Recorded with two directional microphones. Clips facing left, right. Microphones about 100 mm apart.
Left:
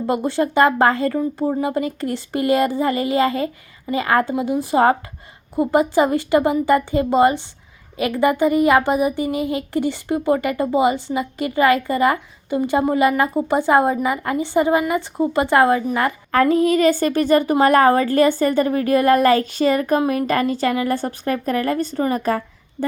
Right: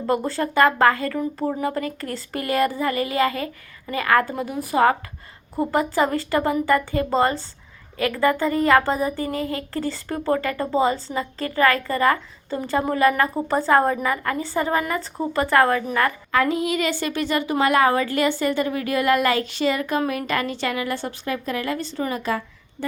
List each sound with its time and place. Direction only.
0.1 s a woman's voice: 20° left (ahead or behind)
16.3 s a woman's voice: 40° left (ahead or behind)